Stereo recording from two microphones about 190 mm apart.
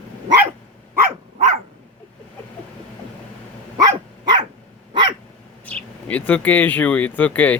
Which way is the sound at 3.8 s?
20° right (ahead or behind).